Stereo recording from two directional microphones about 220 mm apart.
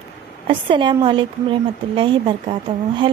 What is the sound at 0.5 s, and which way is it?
A woman's voice, 20° right (ahead or behind).